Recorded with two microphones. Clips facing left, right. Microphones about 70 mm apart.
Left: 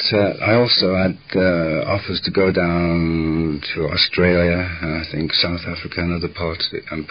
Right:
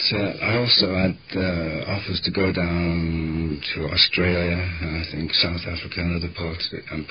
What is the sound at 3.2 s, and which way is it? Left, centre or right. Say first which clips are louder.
Mantra: left 7 dB; left.